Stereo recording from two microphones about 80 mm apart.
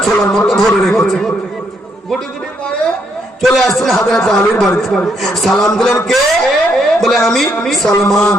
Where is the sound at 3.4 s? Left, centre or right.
Centre.